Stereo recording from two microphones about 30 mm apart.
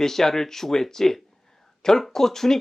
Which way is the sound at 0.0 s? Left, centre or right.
Centre.